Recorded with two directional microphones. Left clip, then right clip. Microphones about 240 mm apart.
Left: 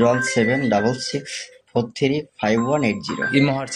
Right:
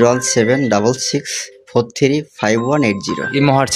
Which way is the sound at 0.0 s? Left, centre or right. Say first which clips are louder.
Right 5 dB; right.